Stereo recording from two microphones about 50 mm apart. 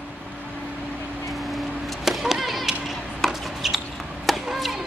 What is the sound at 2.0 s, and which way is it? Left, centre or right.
Chop, centre.